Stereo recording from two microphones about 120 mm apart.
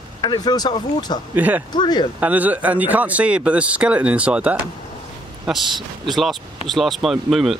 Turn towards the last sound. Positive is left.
turn(degrees=0)  # may be behind; listen again after turning